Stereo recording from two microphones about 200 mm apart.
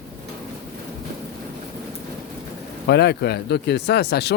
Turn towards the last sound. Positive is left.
turn(degrees=55)  # may be behind; listen again after turning